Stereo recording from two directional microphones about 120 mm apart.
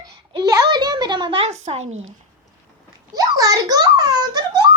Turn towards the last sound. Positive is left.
turn(degrees=-35)  # may be behind; listen again after turning